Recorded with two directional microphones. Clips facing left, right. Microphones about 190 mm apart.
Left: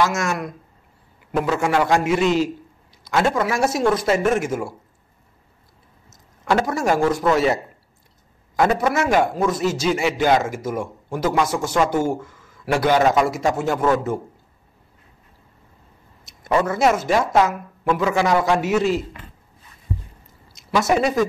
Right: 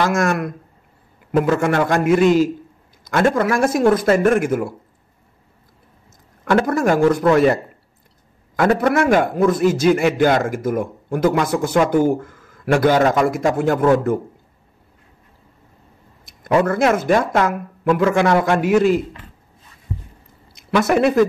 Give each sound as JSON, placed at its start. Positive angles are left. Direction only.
{"t": 0.0, "sound": "a man's voice", "side_deg": -55}
{"t": 6.4, "sound": "a man's voice", "side_deg": -55}
{"t": 16.3, "sound": "speech", "side_deg": -55}
{"t": 20.5, "sound": "speech", "side_deg": -60}